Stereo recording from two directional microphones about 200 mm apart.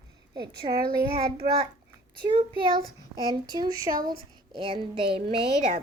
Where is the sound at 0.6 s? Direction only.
30° right (ahead or behind).